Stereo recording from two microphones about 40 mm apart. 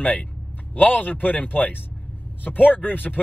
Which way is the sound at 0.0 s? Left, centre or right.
Left.